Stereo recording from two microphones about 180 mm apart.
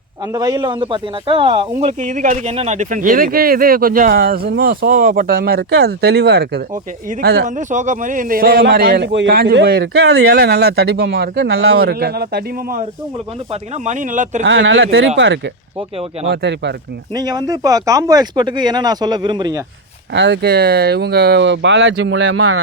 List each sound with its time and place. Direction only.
0.3 s a man's voice: 20° right (ahead or behind); by 7.4 s 65° right (ahead or behind)
7.4 s a man's voice: 45° right (ahead or behind); by 12.4 s 60° right (ahead or behind)
13.5 s speech: 40° right (ahead or behind)
14.4 s speech: 90° right; by 15.1 s 70° right (ahead or behind)
16.3 s speech: 70° right (ahead or behind)
17.2 s speech: 20° right (ahead or behind)
20.1 s speech: 70° right (ahead or behind); by 22.4 s 85° right